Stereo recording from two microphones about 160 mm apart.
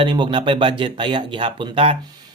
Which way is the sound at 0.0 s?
30° right (ahead or behind).